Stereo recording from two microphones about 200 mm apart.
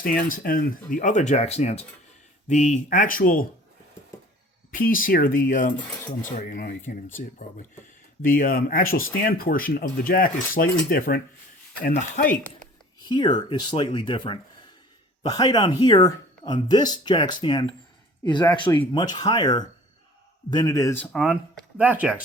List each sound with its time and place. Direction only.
0.0 s speech: 45° left (ahead or behind)
4.7 s speech: 45° left (ahead or behind)
5.9 s speech: 10° left (ahead or behind)
6.3 s speech: 40° left (ahead or behind)
13.1 s speech: 20° left (ahead or behind); by 22.2 s 5° right (ahead or behind)